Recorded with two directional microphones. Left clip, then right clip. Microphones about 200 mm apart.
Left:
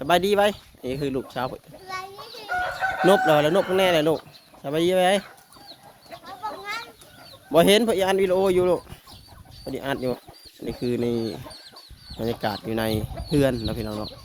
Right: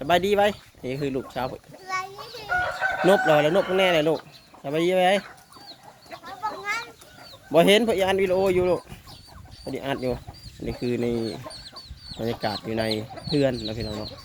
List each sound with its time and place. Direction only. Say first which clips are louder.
0.0 s speech: left 1 dB; 15° left (ahead or behind)
2.6 s chicken: left 1 dB; 55° left (ahead or behind)
3.2 s speech: even; 20° left (ahead or behind)
6.1 s a sound: right 2 dB; centre (ahead or behind)
7.5 s speech: even; 10° left (ahead or behind)
9.6 s speech: left 1 dB; 10° left (ahead or behind)